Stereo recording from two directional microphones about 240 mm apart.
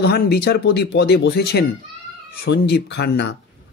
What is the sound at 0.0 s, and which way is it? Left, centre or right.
Speech, left.